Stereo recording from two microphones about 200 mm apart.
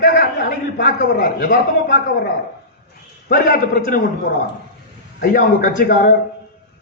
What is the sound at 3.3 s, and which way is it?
Speech, 50° left (ahead or behind).